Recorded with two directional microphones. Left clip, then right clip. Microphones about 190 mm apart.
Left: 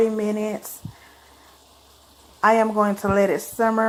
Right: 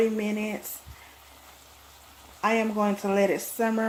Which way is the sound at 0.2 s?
15° left (ahead or behind).